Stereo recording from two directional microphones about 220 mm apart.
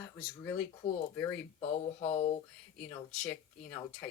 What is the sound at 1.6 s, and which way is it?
Speech, 30° left (ahead or behind).